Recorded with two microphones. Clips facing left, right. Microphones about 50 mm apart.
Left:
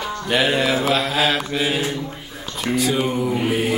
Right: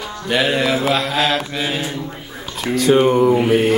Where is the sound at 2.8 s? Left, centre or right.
Right.